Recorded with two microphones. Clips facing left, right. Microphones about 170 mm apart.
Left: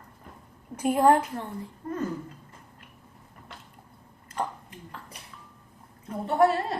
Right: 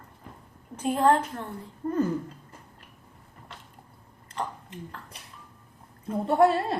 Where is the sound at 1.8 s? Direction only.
30° right (ahead or behind).